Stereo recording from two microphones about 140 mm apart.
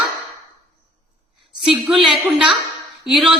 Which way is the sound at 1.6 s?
5° right (ahead or behind).